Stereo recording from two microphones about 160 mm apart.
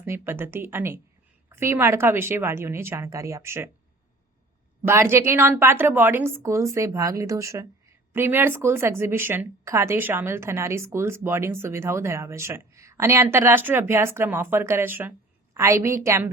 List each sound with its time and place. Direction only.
0.0 s speech: 15° right (ahead or behind)
4.9 s speech: 15° right (ahead or behind)